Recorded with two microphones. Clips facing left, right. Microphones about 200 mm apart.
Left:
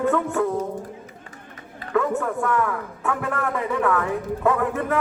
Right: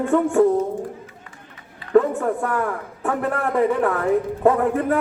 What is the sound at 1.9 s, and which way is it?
A man's voice, 30° right (ahead or behind).